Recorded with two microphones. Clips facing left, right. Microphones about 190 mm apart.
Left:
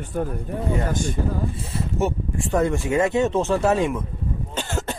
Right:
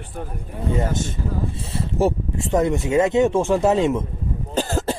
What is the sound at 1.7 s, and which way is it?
Speech, 30° right (ahead or behind).